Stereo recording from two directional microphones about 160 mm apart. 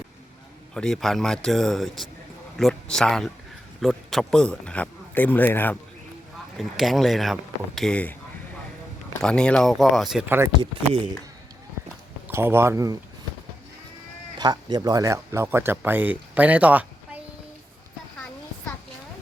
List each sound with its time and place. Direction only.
0.7 s a man's voice: 5° left (ahead or behind)
6.6 s a man's voice: centre (ahead or behind)
9.2 s a man's voice: 5° left (ahead or behind); by 10.5 s 10° right (ahead or behind)
10.6 s speech: 30° right (ahead or behind)
12.3 s speech: 15° right (ahead or behind)
14.3 s speech: 25° right (ahead or behind); by 16.8 s 10° right (ahead or behind)